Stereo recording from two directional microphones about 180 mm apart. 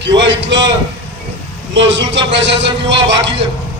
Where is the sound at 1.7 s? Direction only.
85° right.